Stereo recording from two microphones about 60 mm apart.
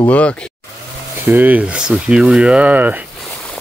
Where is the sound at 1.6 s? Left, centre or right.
Centre.